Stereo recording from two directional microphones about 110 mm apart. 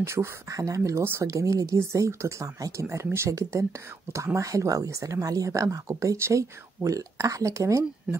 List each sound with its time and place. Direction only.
0.0 s speech: 25° right (ahead or behind)